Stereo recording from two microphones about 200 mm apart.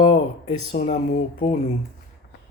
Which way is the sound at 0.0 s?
25° left (ahead or behind).